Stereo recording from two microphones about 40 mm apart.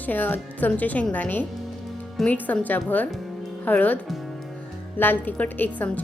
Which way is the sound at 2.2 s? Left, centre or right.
Centre.